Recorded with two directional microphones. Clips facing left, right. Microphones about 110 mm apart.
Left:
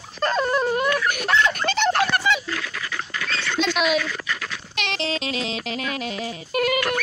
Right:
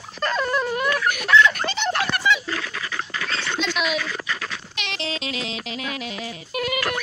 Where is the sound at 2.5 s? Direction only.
30° right (ahead or behind).